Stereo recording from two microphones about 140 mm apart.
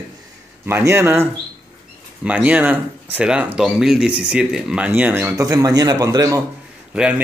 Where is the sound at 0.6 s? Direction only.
15° right (ahead or behind).